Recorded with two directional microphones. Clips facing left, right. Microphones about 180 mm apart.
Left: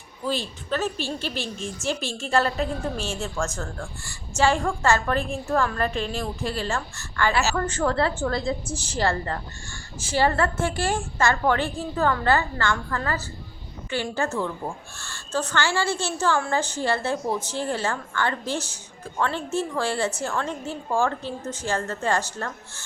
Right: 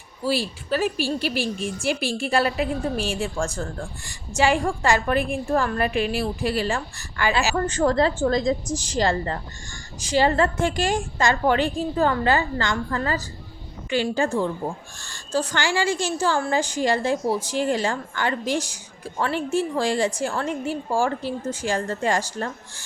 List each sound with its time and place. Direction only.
0.3 s a woman's voice: 10° right (ahead or behind)